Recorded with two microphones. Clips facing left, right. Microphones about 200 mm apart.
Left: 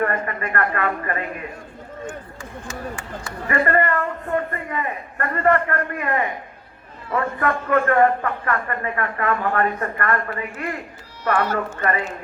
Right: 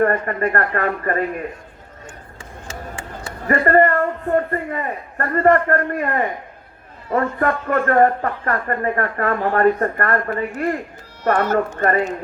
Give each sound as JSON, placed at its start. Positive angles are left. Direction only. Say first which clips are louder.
{"t": 0.0, "sound": "a man's voice", "louder": "right 6 dB", "side_deg": -40}
{"t": 2.4, "sound": "a sound", "louder": "even", "side_deg": -25}
{"t": 3.4, "sound": "a man's voice", "louder": "right 5 dB", "side_deg": -40}
{"t": 7.3, "sound": "a man's voice", "louder": "right 1 dB", "side_deg": -40}